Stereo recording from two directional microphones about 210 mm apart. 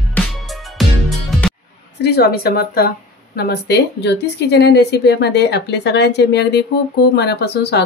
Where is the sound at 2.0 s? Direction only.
50° left (ahead or behind).